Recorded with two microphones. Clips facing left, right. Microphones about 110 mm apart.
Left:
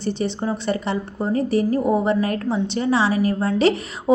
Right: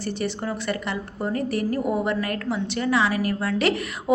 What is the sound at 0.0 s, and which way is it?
A woman's voice, 25° left (ahead or behind).